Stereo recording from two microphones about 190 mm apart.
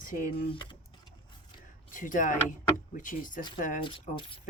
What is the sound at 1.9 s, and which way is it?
Speech, 45° left (ahead or behind).